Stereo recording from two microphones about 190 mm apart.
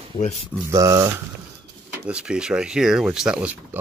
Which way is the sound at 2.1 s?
5° right (ahead or behind).